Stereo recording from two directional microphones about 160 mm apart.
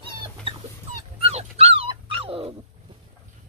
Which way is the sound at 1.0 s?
35° right (ahead or behind).